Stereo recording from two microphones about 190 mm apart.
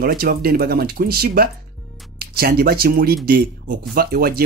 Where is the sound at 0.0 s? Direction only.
50° right (ahead or behind).